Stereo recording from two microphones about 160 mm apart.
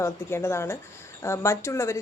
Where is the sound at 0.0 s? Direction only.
15° left (ahead or behind).